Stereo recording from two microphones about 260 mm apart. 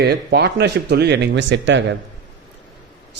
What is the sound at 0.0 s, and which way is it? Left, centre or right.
Speech, right.